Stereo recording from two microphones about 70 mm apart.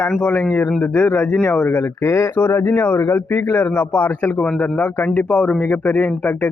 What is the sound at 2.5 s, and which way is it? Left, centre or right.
Speech, left.